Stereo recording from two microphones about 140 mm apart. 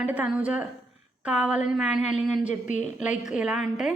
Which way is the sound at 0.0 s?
10° right (ahead or behind).